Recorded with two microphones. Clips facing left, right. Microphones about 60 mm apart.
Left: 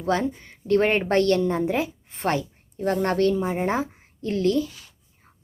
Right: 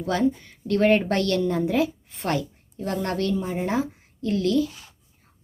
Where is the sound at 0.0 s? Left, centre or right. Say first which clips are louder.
Right 1 dB; left.